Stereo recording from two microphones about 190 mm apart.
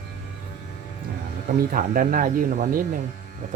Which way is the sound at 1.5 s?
50° right (ahead or behind).